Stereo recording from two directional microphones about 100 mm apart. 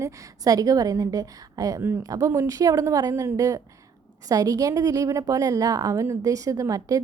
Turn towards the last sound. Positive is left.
turn(degrees=-35)  # may be behind; listen again after turning